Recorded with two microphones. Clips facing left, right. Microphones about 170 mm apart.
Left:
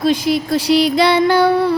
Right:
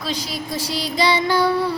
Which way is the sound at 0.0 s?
55° left (ahead or behind).